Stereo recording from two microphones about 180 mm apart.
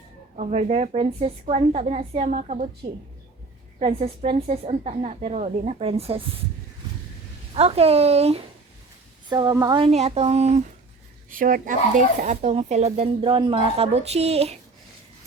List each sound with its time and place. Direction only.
0.3 s speech: 40° right (ahead or behind)
3.8 s speech: 35° right (ahead or behind)
7.5 s speech: 35° right (ahead or behind)
9.3 s a woman's voice: 20° right (ahead or behind)
9.8 s speech: 35° right (ahead or behind)
11.3 s speech: 50° right (ahead or behind)